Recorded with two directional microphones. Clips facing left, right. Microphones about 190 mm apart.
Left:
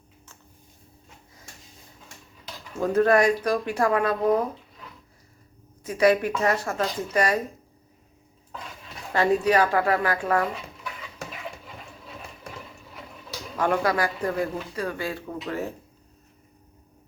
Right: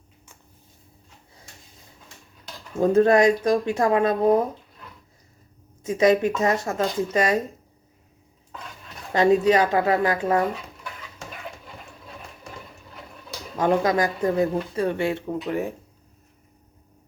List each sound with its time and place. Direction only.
2.8 s speech: 25° right (ahead or behind)
5.8 s speech: 20° right (ahead or behind)
9.1 s speech: 20° right (ahead or behind)
11.3 s a sound: centre (ahead or behind)
13.6 s speech: 20° right (ahead or behind)